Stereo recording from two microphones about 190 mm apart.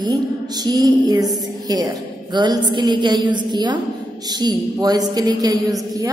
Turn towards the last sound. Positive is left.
turn(degrees=-20)  # may be behind; listen again after turning